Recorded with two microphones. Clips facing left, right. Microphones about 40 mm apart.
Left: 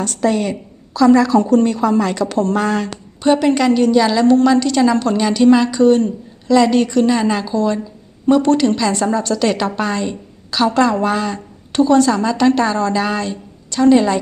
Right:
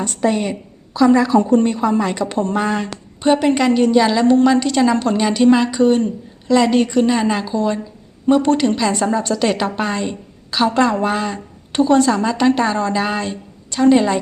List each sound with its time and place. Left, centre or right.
0.0 s a woman's voice: centre